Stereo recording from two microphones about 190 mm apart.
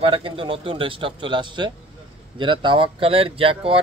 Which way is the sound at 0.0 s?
25° right (ahead or behind).